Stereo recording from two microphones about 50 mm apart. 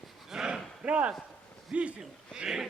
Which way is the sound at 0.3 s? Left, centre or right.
Centre.